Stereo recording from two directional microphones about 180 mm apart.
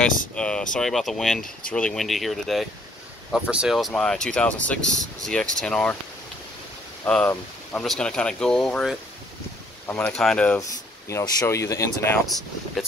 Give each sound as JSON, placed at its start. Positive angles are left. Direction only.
{"t": 0.4, "sound": "speech", "side_deg": 5}
{"t": 7.1, "sound": "speech", "side_deg": 5}
{"t": 10.6, "sound": "speech", "side_deg": 20}